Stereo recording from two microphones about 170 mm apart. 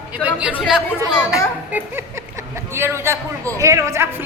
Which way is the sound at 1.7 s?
15° right (ahead or behind).